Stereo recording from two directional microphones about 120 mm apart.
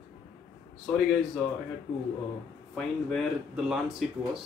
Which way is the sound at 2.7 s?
5° left (ahead or behind).